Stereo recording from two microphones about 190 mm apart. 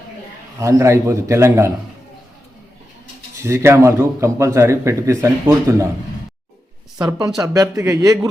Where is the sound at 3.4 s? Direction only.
15° right (ahead or behind).